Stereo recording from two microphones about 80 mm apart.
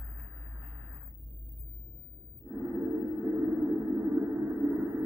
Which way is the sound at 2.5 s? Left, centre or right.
Right.